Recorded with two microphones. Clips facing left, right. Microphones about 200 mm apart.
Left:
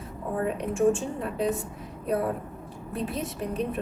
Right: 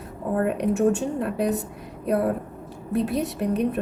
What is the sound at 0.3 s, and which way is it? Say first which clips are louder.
A woman's voice: right 4 dB; 65° right (ahead or behind).